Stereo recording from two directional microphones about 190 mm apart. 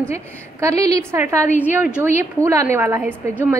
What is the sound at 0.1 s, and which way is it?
A woman's voice, 15° right (ahead or behind).